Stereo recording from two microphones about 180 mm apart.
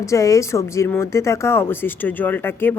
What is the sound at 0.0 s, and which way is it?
Speech, 15° left (ahead or behind).